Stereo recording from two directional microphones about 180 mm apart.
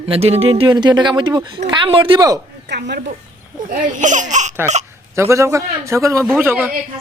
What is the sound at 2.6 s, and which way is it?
Stir, 70° right (ahead or behind).